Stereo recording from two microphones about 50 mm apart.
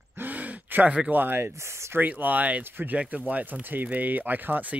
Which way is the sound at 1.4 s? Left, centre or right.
Right.